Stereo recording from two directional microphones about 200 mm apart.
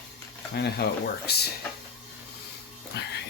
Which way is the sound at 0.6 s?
55° left (ahead or behind).